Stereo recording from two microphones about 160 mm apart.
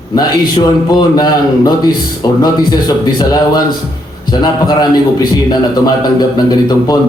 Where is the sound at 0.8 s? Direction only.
25° left (ahead or behind).